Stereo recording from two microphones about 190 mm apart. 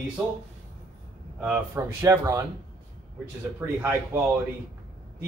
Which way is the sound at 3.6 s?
10° right (ahead or behind).